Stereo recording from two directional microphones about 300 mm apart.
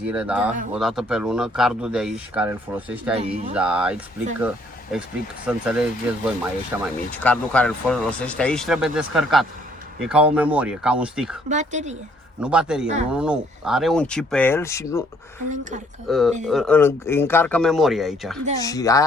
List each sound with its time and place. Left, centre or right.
0.1 s speech: centre
7.1 s speech: centre
11.4 s speech: right
12.4 s speech: centre
16.0 s speech: centre
18.6 s speech: centre